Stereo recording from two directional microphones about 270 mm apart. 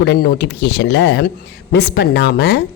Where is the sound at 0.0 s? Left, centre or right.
Left.